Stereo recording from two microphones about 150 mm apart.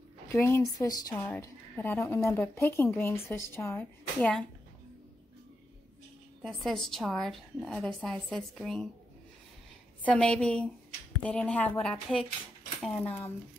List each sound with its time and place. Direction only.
0.3 s a woman's voice: 15° left (ahead or behind)
6.4 s a woman's voice: centre (ahead or behind)
10.0 s a woman's voice: 5° left (ahead or behind)
13.0 s speech: 40° left (ahead or behind)